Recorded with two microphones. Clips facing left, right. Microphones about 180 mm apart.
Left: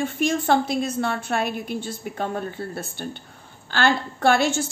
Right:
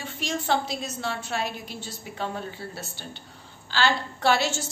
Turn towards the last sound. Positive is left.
turn(degrees=55)  # may be behind; listen again after turning